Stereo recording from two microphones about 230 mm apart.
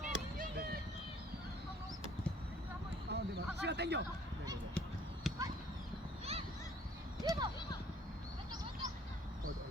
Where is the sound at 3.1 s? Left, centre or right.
Right.